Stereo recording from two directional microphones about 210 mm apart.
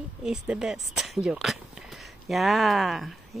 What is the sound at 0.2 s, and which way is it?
Speech, 5° right (ahead or behind).